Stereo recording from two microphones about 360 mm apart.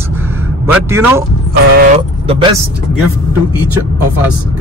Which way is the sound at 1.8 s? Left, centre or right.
Centre.